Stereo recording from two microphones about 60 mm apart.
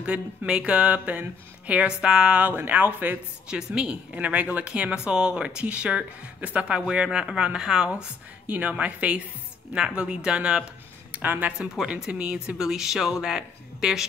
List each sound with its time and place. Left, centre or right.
0.0 s a woman's voice: centre
2.4 s speech: right
3.4 s a woman's voice: centre
8.0 s a woman's voice: right
11.1 s speech: right
11.9 s a woman's voice: centre